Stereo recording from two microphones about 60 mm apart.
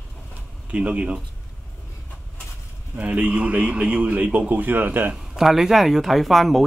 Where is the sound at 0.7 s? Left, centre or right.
Centre.